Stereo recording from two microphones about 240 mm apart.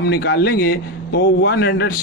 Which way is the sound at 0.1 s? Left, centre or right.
Left.